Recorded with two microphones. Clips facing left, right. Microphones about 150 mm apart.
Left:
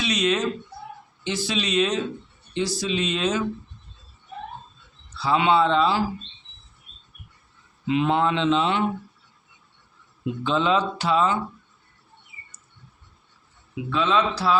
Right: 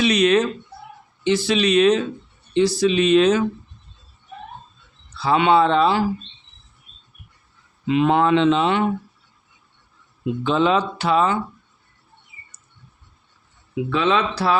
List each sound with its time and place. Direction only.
0.0 s speech: 60° right (ahead or behind)
5.2 s speech: 60° right (ahead or behind)
7.9 s speech: 60° right (ahead or behind)
10.4 s speech: 60° right (ahead or behind)
13.9 s speech: 65° right (ahead or behind)